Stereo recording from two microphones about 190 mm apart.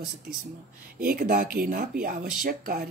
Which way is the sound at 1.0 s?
50° right (ahead or behind).